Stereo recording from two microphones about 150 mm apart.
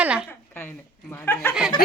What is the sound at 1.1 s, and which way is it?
Speech, 15° left (ahead or behind).